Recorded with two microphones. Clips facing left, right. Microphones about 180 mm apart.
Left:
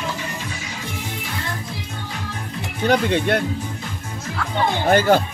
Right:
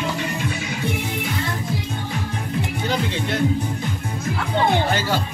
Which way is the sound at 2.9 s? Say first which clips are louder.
Left 8 dB; 60° left (ahead or behind).